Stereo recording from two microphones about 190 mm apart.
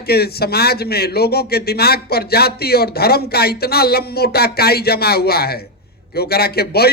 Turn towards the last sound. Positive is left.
turn(degrees=55)  # may be behind; listen again after turning